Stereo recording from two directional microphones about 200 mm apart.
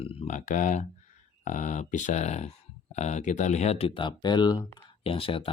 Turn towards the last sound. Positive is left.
turn(degrees=25)  # may be behind; listen again after turning